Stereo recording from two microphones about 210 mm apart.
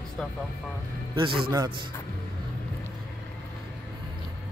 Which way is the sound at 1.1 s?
25° right (ahead or behind).